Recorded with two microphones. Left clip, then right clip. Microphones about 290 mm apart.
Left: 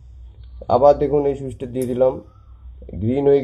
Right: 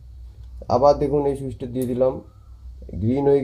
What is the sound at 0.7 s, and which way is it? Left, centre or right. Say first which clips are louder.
Speech: left 3 dB; left.